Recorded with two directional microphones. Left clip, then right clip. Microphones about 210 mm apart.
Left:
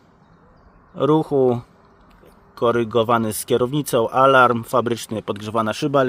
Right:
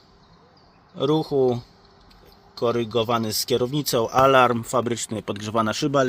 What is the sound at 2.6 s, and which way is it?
Speech, 15° left (ahead or behind).